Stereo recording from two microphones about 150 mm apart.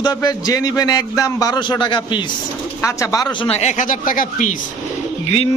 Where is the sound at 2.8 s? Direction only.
20° left (ahead or behind).